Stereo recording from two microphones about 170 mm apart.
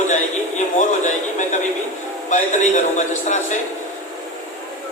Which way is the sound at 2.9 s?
45° left (ahead or behind).